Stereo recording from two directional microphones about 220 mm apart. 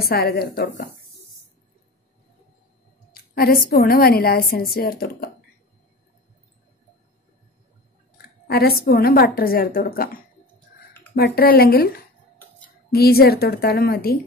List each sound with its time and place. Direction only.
0.0 s a woman's voice: 45° left (ahead or behind)
3.1 s a woman's voice: 45° left (ahead or behind)
8.5 s a woman's voice: 45° left (ahead or behind)
11.1 s a woman's voice: 45° left (ahead or behind)
12.9 s a woman's voice: 45° left (ahead or behind)